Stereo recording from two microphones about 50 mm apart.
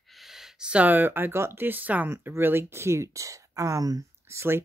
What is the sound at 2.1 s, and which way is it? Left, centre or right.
Speech, right.